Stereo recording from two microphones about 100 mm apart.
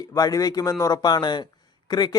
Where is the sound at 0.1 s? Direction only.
35° left (ahead or behind).